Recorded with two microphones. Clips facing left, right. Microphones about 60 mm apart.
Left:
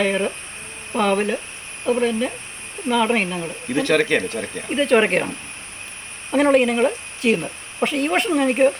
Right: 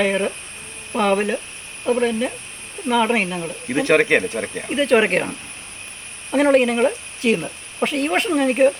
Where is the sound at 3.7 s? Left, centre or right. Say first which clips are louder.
Right 2 dB; right.